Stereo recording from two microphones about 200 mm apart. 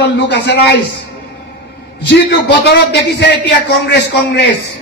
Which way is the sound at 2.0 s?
60° left (ahead or behind).